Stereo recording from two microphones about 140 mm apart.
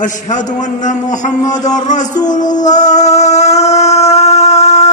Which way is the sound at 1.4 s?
25° left (ahead or behind).